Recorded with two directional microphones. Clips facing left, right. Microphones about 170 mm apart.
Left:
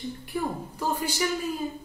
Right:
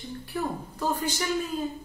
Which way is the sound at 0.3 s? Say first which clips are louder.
Even; 10° left (ahead or behind).